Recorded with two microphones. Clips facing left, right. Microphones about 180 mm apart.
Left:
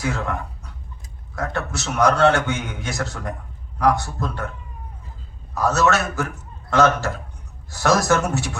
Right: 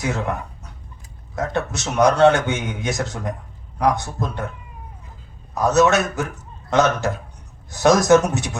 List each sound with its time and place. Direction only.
1.4 s a man's voice: 20° right (ahead or behind)
5.5 s a man's voice: 20° right (ahead or behind)